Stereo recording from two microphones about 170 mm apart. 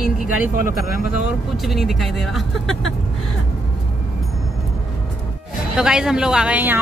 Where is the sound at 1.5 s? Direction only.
Centre (ahead or behind).